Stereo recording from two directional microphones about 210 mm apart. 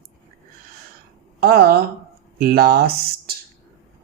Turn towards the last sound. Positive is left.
turn(degrees=-45)  # may be behind; listen again after turning